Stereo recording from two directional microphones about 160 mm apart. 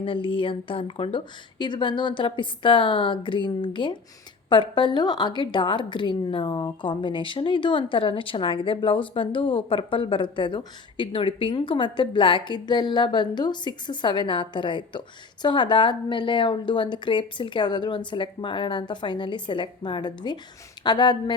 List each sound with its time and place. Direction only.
0.0 s a woman's voice: 35° left (ahead or behind)